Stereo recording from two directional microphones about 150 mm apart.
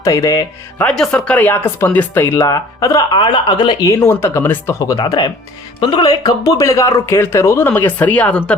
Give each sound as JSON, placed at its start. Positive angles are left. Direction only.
{"t": 0.0, "sound": "speech", "side_deg": 20}
{"t": 0.9, "sound": "speech", "side_deg": 5}
{"t": 4.0, "sound": "speech", "side_deg": 15}